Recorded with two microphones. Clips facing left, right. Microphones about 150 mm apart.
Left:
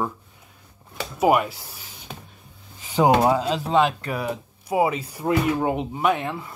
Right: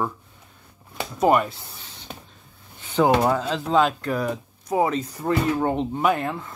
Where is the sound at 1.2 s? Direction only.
5° left (ahead or behind).